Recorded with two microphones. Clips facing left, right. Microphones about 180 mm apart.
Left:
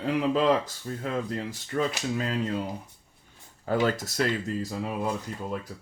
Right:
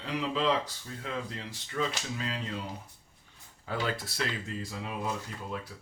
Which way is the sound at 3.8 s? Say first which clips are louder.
Left 6 dB; 45° left (ahead or behind).